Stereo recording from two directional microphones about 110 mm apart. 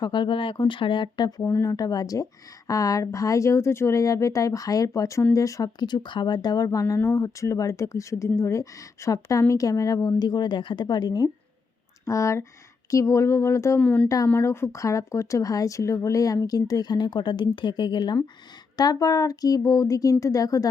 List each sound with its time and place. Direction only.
0.0 s speech: 45° left (ahead or behind)
1.4 s speech: 20° left (ahead or behind)
1.7 s speech: 35° left (ahead or behind)
12.0 s speech: 30° left (ahead or behind)
13.7 s speech: 15° left (ahead or behind); by 18.2 s 45° left (ahead or behind)
18.8 s speech: 35° left (ahead or behind)